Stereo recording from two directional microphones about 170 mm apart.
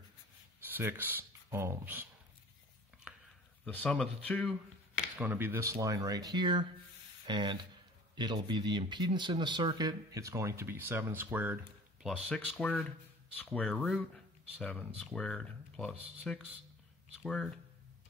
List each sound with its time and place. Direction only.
0.7 s speech: 10° right (ahead or behind)
3.6 s speech: 5° left (ahead or behind)
5.1 s speech: 10° right (ahead or behind)
11.3 s a sound: 10° right (ahead or behind)
12.3 s speech: 5° left (ahead or behind)